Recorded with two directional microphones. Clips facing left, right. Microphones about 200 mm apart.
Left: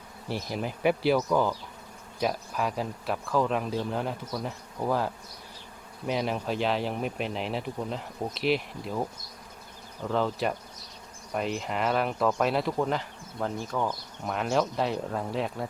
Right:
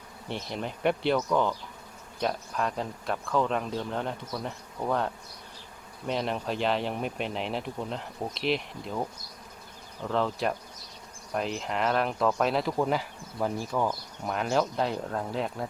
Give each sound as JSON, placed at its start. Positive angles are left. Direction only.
{"t": 0.3, "sound": "speech", "side_deg": 5}